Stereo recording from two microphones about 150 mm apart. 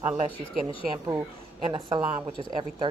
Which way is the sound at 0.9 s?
30° right (ahead or behind).